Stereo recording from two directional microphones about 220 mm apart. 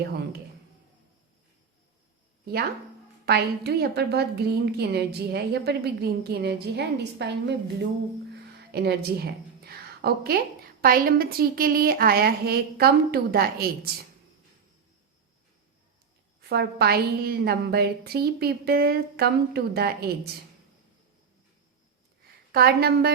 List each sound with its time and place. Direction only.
3.2 s a woman's voice: 50° right (ahead or behind)
8.7 s a woman's voice: 45° right (ahead or behind)
16.4 s a woman's voice: 50° right (ahead or behind)
22.5 s a woman's voice: 45° right (ahead or behind)